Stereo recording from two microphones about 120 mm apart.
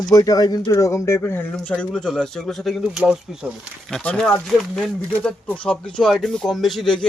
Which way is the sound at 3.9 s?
5° left (ahead or behind).